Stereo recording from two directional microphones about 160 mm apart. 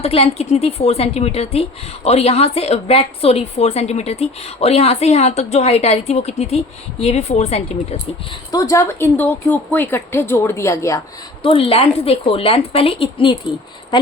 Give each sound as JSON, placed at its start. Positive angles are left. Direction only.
{"t": 0.0, "sound": "a woman's voice", "side_deg": 40}
{"t": 8.5, "sound": "a woman's voice", "side_deg": 20}
{"t": 11.4, "sound": "a woman's voice", "side_deg": 35}